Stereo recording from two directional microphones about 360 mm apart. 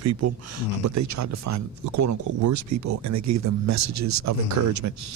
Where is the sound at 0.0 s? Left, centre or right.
Right.